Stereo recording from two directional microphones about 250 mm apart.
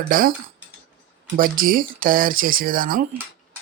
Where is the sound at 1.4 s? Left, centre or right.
Right.